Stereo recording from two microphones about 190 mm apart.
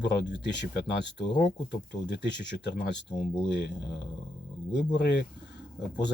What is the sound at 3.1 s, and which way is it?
Speech, 25° left (ahead or behind).